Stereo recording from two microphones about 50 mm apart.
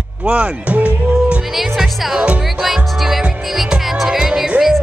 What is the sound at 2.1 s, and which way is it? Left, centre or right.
Speech, right.